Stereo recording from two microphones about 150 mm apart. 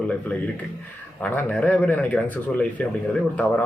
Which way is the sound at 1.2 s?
10° left (ahead or behind).